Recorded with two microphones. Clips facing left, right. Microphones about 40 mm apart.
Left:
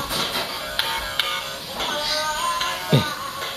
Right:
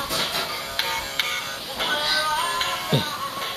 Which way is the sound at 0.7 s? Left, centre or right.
Centre.